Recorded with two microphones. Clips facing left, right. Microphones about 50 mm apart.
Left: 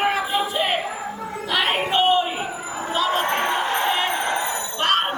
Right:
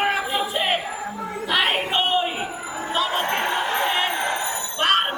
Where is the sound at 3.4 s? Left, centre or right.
Left.